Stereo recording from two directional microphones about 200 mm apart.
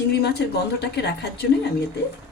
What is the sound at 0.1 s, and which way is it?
A woman's voice, 55° left (ahead or behind).